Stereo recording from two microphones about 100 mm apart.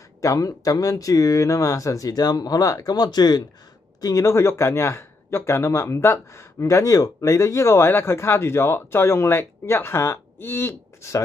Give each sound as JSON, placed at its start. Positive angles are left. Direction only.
{"t": 0.2, "sound": "speech", "side_deg": 35}
{"t": 4.0, "sound": "speech", "side_deg": 35}